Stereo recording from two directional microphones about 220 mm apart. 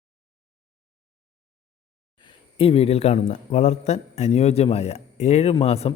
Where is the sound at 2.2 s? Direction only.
25° left (ahead or behind).